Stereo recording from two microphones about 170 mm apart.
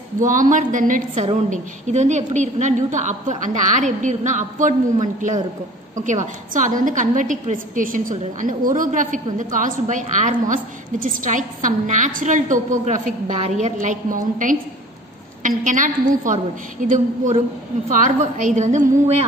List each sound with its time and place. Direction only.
0.2 s a woman's voice: 50° right (ahead or behind)
1.1 s a woman's voice: 40° right (ahead or behind)